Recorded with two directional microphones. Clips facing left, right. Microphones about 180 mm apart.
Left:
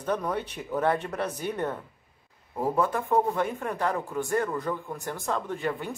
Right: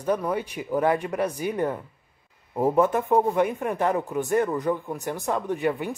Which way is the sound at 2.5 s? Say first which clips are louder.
Right 5 dB; 20° right (ahead or behind).